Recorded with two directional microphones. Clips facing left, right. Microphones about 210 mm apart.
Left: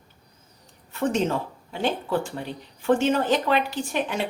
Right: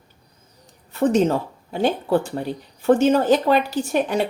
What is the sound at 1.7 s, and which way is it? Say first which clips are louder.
Speech: right 6 dB; 40° right (ahead or behind).